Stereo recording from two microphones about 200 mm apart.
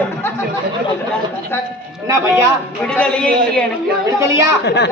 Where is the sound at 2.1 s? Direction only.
15° right (ahead or behind).